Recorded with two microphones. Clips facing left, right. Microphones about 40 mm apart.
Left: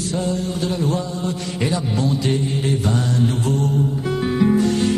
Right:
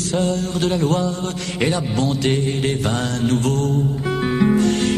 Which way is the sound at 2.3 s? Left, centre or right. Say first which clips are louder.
Right 1 dB; right.